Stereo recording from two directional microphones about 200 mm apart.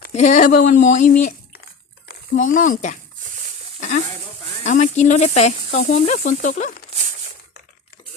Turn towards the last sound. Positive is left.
turn(degrees=40)  # may be behind; listen again after turning